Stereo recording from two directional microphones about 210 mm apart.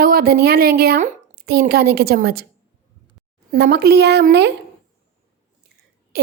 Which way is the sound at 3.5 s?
50° right (ahead or behind).